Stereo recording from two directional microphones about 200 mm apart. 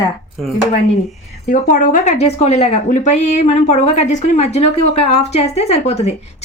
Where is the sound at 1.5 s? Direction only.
40° left (ahead or behind).